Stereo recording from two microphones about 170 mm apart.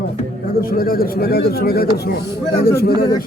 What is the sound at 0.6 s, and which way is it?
Speech, 60° left (ahead or behind).